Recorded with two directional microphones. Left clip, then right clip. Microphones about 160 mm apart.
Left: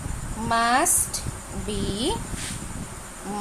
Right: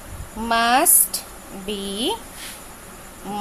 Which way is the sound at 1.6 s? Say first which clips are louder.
Right 3 dB; 15° right (ahead or behind).